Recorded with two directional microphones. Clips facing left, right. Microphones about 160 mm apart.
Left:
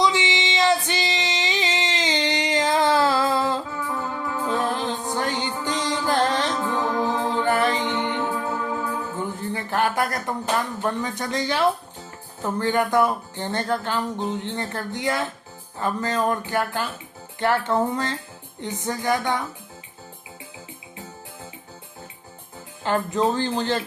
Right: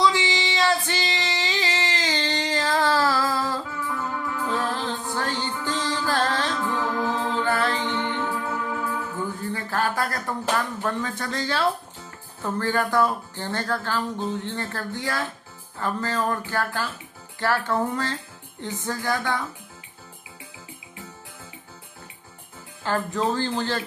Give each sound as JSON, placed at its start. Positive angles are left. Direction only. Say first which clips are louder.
{"t": 0.0, "sound": "female singing", "louder": "even", "side_deg": 20}
{"t": 3.9, "sound": "music", "louder": "left 1 dB", "side_deg": 35}
{"t": 4.4, "sound": "music", "louder": "left 3 dB", "side_deg": 20}
{"t": 10.8, "sound": "speech", "louder": "left 2 dB", "side_deg": 15}
{"t": 22.8, "sound": "speech", "louder": "left 3 dB", "side_deg": 20}